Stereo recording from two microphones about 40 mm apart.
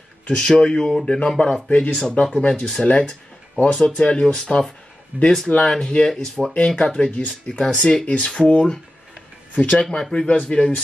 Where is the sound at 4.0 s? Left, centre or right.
Left.